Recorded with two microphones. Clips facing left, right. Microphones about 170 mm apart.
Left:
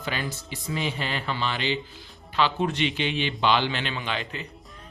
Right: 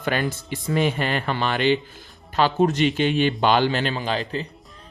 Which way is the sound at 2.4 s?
45° right (ahead or behind).